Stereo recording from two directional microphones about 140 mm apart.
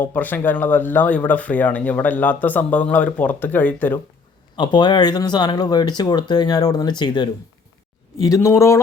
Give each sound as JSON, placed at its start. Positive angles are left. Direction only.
{"t": 0.0, "sound": "speech", "side_deg": 15}
{"t": 4.5, "sound": "speech", "side_deg": 30}